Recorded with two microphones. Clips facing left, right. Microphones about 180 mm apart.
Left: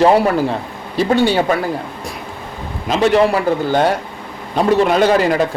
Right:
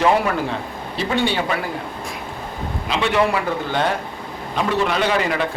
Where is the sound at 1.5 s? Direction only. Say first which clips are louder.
Left 7 dB; 45° left (ahead or behind).